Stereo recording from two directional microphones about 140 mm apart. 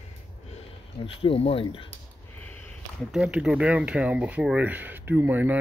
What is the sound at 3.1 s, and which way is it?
Speech, 5° right (ahead or behind).